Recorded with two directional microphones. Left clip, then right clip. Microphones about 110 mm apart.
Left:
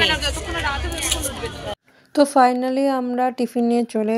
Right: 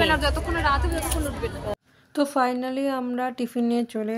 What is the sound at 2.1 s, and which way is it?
A woman's voice, 40° left (ahead or behind).